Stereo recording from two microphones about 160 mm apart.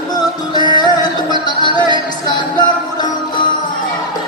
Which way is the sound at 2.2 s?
25° left (ahead or behind).